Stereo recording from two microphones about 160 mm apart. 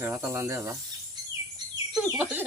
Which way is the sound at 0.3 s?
15° right (ahead or behind).